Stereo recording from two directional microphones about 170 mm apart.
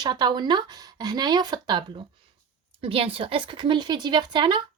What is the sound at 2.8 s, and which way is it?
Speech, 35° right (ahead or behind).